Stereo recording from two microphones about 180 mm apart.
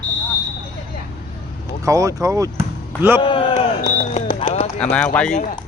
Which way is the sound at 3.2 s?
30° left (ahead or behind).